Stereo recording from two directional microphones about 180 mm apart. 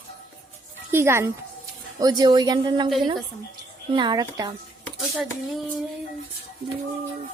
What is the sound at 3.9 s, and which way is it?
Speech, 25° right (ahead or behind).